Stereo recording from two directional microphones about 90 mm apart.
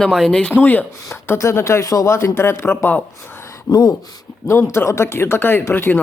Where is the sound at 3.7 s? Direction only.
50° left (ahead or behind).